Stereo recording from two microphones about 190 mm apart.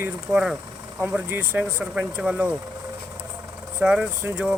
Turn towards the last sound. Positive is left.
turn(degrees=-5)  # may be behind; listen again after turning